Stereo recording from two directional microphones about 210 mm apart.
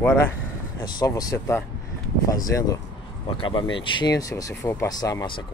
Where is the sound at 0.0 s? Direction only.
10° left (ahead or behind).